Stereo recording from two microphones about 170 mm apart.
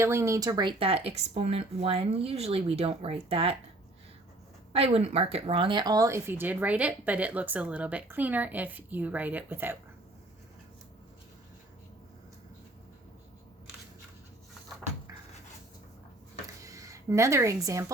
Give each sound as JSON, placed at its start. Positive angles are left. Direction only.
{"t": 0.0, "sound": "speech", "side_deg": -15}
{"t": 4.7, "sound": "speech", "side_deg": -35}
{"t": 16.6, "sound": "speech", "side_deg": -20}